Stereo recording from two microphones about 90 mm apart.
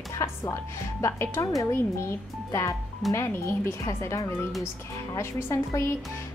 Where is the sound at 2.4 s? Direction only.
35° left (ahead or behind).